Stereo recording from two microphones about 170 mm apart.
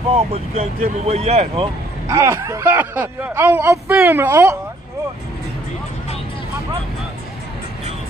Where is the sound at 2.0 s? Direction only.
15° right (ahead or behind).